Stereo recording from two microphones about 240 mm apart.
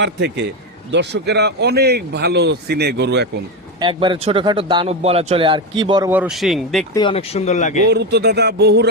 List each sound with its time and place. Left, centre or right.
0.0 s a man's voice: right
3.8 s a man's voice: centre
6.9 s speech: left
7.9 s a man's voice: right